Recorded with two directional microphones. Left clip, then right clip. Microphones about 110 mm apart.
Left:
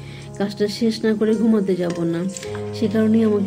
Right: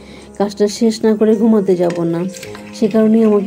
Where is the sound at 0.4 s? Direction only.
35° right (ahead or behind).